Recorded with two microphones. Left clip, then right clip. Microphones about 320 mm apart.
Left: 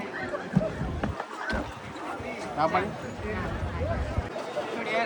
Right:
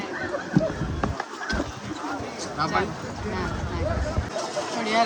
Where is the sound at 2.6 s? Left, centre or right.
Centre.